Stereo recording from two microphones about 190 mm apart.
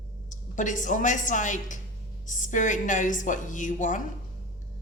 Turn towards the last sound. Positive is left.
turn(degrees=40)  # may be behind; listen again after turning